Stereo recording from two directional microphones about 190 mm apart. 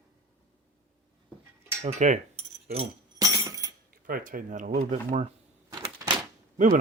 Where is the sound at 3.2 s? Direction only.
15° right (ahead or behind).